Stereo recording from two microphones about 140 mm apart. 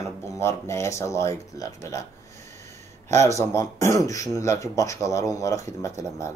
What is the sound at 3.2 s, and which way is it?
Speech, 20° left (ahead or behind).